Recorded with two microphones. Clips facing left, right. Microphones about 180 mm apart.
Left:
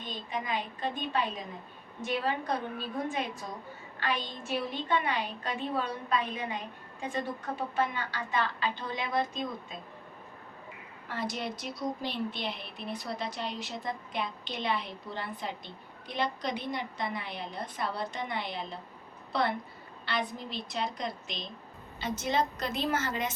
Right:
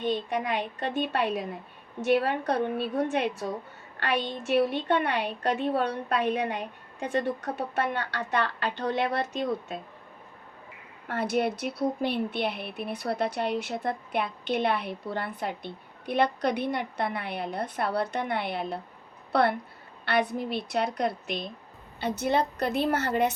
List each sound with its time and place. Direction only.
0.0 s a woman's voice: 65° right (ahead or behind)
11.1 s a woman's voice: 60° right (ahead or behind)